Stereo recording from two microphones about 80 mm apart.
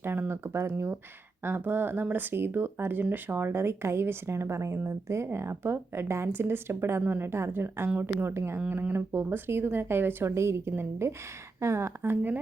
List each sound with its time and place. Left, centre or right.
0.0 s speech: right